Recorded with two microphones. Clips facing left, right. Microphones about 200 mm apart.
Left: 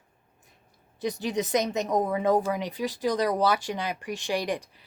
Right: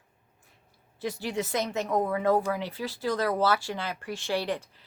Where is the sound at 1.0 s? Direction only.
20° left (ahead or behind).